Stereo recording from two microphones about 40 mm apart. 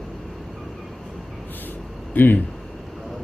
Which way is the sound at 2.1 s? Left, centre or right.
Left.